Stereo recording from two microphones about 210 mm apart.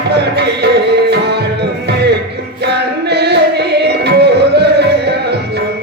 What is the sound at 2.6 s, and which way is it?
Music, 50° right (ahead or behind).